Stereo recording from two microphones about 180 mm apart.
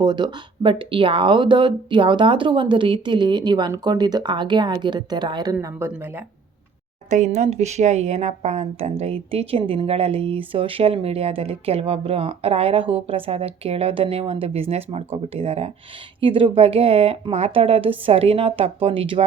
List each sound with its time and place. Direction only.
0.0 s speech: 25° right (ahead or behind)
5.5 s speech: 10° right (ahead or behind)
7.1 s speech: 40° right (ahead or behind)